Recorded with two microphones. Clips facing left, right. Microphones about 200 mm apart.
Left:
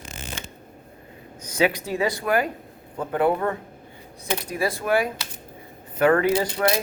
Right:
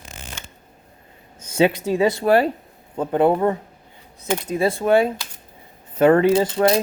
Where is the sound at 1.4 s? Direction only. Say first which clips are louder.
Right 4 dB; 25° right (ahead or behind).